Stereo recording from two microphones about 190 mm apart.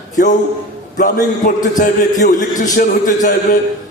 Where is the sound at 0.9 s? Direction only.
45° left (ahead or behind).